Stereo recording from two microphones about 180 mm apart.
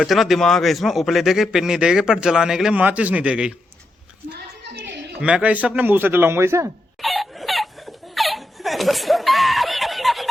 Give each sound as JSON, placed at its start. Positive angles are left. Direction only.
{"t": 0.0, "sound": "a man's voice", "side_deg": 0}
{"t": 4.3, "sound": "a sound", "side_deg": -70}
{"t": 5.2, "sound": "speech", "side_deg": -5}
{"t": 7.0, "sound": "laughter", "side_deg": 0}